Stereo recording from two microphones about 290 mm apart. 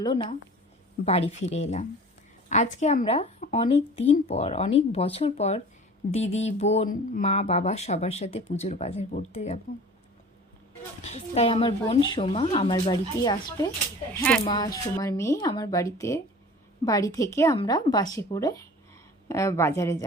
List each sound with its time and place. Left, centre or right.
0.0 s speech: centre
11.0 s speech: left